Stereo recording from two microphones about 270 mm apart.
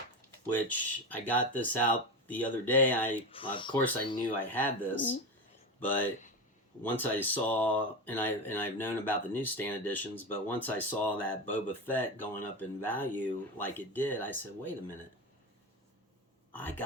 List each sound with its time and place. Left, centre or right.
0.7 s speech: centre
3.3 s speech: centre
3.8 s speech: centre
16.5 s speech: centre